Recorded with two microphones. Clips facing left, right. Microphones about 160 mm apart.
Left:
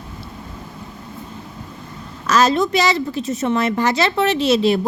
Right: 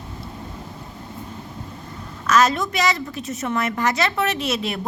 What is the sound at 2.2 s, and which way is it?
A woman's voice, 30° left (ahead or behind).